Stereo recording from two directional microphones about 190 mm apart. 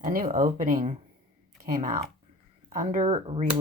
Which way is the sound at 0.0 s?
40° right (ahead or behind).